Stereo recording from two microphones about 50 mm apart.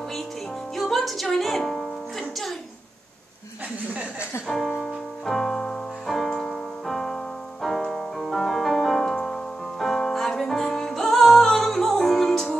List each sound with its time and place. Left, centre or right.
0.7 s music: centre
3.9 s speech: right
4.5 s speech: centre
5.2 s music: centre